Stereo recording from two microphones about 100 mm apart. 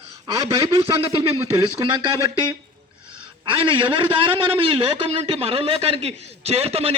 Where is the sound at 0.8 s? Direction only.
60° right (ahead or behind).